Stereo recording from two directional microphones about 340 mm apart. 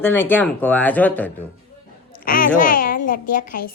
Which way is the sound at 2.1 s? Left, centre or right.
Left.